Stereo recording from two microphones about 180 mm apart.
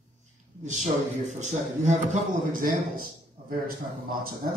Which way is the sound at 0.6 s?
40° right (ahead or behind).